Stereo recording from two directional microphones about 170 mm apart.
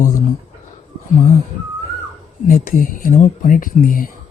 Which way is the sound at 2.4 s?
55° left (ahead or behind).